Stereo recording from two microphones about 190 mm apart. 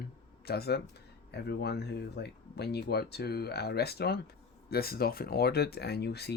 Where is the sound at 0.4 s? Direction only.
55° left (ahead or behind).